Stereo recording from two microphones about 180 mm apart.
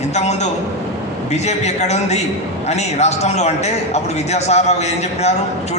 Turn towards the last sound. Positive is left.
turn(degrees=40)  # may be behind; listen again after turning